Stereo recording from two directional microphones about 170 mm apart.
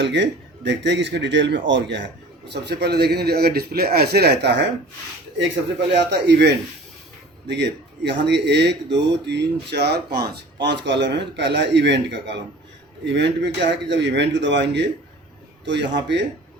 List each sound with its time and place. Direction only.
0.0 s a man's voice: 90° right
2.5 s a man's voice: 75° right (ahead or behind)
5.9 s a man's voice: 90° right